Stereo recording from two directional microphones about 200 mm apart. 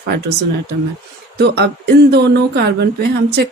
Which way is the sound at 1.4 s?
55° right (ahead or behind).